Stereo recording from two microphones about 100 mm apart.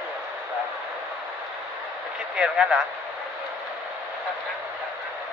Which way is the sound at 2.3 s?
10° right (ahead or behind).